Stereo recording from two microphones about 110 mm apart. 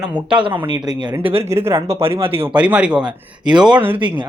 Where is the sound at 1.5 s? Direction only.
25° right (ahead or behind).